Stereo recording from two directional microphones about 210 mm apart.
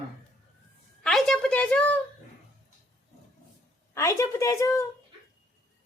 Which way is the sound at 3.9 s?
15° left (ahead or behind).